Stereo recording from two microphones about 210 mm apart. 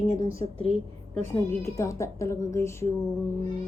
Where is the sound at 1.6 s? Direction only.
15° left (ahead or behind).